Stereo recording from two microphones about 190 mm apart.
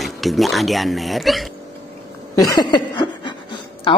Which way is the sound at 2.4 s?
20° left (ahead or behind).